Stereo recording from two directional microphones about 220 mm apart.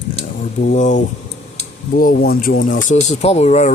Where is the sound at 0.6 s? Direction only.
35° left (ahead or behind).